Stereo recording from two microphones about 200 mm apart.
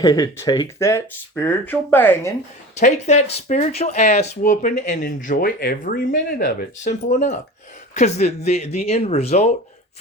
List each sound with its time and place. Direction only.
0.0 s speech: 20° left (ahead or behind)
2.7 s speech: 35° left (ahead or behind)